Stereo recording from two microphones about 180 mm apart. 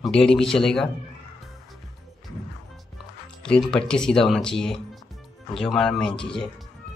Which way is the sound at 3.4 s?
5° left (ahead or behind).